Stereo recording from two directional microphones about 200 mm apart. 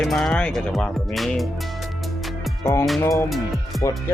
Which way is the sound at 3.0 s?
15° left (ahead or behind).